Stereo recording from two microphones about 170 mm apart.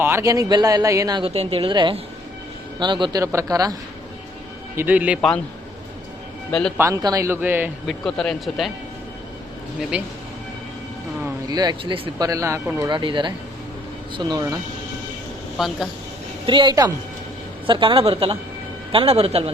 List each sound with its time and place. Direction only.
0.0 s speech: 15° right (ahead or behind)
1.3 s a woman's voice: 35° right (ahead or behind)
4.8 s speech: 10° right (ahead or behind)
6.5 s speech: 5° left (ahead or behind)
6.7 s speech: 20° right (ahead or behind)
7.9 s speech: 5° left (ahead or behind)
11.2 s speech: 20° right (ahead or behind)
12.3 s speech: 20° right (ahead or behind)
12.8 s speech: 30° right (ahead or behind)
15.5 s speech: centre (ahead or behind)
16.5 s a woman's voice: 25° right (ahead or behind)